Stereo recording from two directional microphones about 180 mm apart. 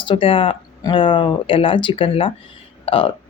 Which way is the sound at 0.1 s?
30° left (ahead or behind).